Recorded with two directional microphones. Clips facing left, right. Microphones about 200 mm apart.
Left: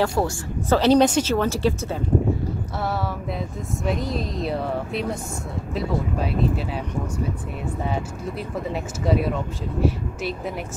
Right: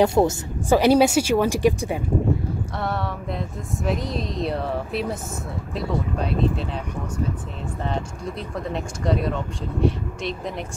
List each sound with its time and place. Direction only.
0.0 s speech: 20° right (ahead or behind)
2.8 s speech: centre (ahead or behind)
7.8 s speech: 5° left (ahead or behind)